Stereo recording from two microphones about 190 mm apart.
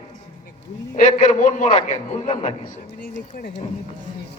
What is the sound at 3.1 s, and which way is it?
Speech, 45° left (ahead or behind).